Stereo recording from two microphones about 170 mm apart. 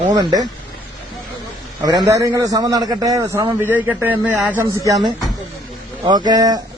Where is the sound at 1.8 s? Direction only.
25° right (ahead or behind).